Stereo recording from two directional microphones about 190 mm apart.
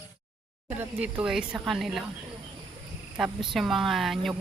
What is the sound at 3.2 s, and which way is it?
Speech, centre (ahead or behind).